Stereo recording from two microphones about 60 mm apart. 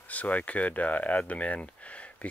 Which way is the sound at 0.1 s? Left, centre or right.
Left.